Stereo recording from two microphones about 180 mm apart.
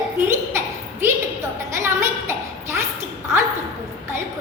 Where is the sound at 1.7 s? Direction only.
15° right (ahead or behind).